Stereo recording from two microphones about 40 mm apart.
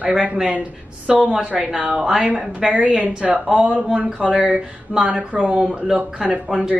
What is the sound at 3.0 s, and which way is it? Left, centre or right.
Speech, right.